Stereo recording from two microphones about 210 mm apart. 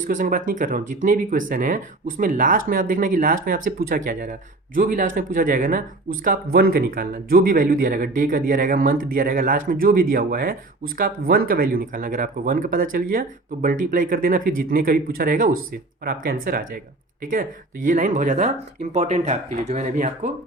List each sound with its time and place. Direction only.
0.1 s speech: 40° right (ahead or behind)